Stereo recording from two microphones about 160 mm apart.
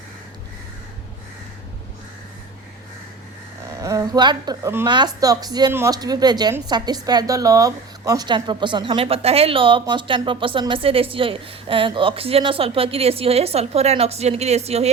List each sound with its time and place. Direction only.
3.8 s a woman's voice: 20° right (ahead or behind); by 14.8 s 40° right (ahead or behind)